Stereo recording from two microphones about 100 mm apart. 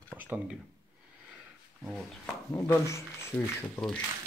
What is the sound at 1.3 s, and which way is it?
Roaring cats, 5° right (ahead or behind).